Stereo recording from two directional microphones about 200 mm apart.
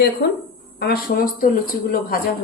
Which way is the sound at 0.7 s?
50° left (ahead or behind).